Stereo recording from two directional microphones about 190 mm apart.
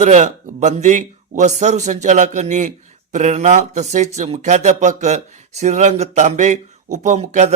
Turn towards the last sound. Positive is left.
turn(degrees=-40)  # may be behind; listen again after turning